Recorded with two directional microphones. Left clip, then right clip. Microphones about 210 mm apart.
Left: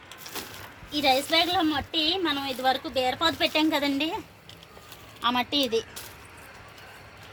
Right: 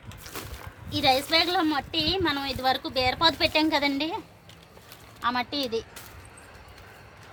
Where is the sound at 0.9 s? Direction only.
5° right (ahead or behind).